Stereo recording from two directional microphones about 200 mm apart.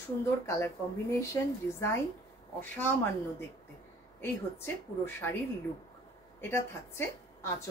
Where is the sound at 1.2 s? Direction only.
15° left (ahead or behind).